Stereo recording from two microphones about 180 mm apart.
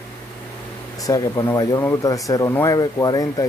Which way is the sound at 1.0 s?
20° left (ahead or behind).